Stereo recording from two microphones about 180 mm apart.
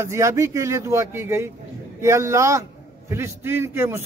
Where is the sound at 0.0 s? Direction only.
15° right (ahead or behind).